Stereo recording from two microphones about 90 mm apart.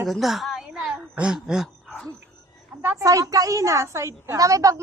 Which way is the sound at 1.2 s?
10° right (ahead or behind).